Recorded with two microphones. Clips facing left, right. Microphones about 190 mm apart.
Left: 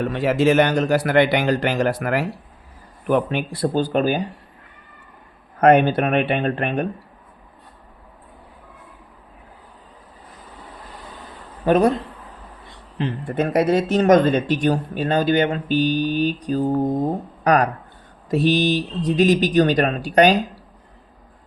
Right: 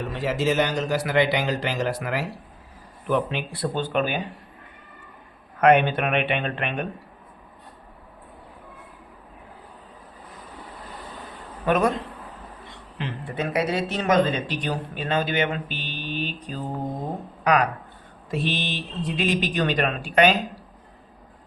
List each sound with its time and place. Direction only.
0.0 s a man's voice: 60° left (ahead or behind); by 4.2 s 40° left (ahead or behind)
5.5 s speech: 40° left (ahead or behind)
11.6 s speech: 35° left (ahead or behind)
13.2 s speech: 50° left (ahead or behind)